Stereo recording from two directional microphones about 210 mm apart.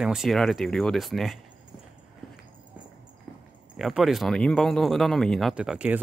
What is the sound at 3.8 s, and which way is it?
Speech, centre (ahead or behind).